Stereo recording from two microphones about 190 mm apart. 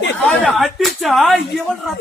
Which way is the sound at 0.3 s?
Centre (ahead or behind).